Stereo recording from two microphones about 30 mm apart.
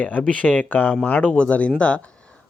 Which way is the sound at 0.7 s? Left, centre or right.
Left.